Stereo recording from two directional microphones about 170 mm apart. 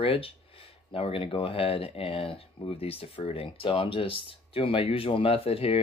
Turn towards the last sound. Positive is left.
turn(degrees=35)  # may be behind; listen again after turning